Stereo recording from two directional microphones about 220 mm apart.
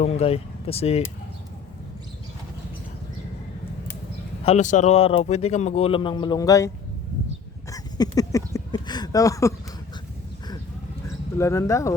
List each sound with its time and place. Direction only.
0.0 s speech: 30° left (ahead or behind)
4.4 s a man's voice: 30° left (ahead or behind); by 6.7 s 15° left (ahead or behind)
7.7 s a sound: 15° left (ahead or behind)
11.3 s speech: 15° left (ahead or behind)